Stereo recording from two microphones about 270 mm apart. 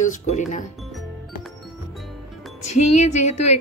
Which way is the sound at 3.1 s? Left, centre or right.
Left.